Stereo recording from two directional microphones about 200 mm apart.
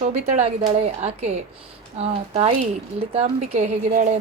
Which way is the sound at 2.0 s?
30° right (ahead or behind).